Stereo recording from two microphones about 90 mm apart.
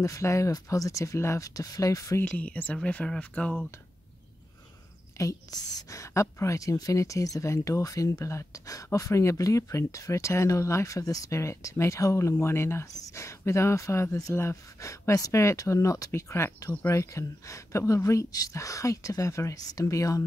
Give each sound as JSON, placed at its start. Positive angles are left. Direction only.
{"t": 0.0, "sound": "a woman's voice", "side_deg": 35}
{"t": 2.2, "sound": "speech", "side_deg": 15}
{"t": 5.1, "sound": "a woman's voice", "side_deg": 40}